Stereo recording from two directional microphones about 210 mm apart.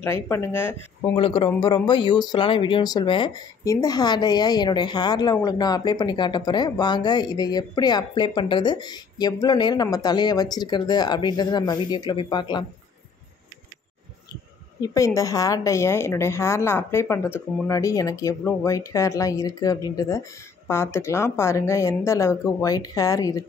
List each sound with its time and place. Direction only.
0.0 s a woman's voice: 10° left (ahead or behind)
1.1 s speech: 25° left (ahead or behind)
14.8 s a woman's voice: 15° left (ahead or behind)